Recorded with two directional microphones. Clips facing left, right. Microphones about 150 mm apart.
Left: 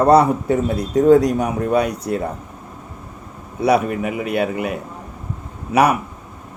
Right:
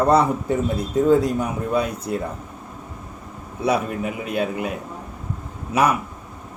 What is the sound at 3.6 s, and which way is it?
Speech, 65° left (ahead or behind).